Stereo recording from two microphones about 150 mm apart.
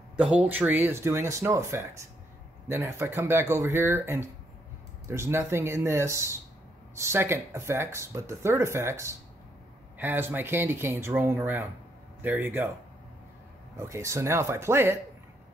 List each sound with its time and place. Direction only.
0.2 s speech: 10° right (ahead or behind)
13.7 s speech: 20° right (ahead or behind)